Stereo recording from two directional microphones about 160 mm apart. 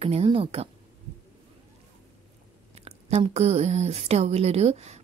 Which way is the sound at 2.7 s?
40° right (ahead or behind).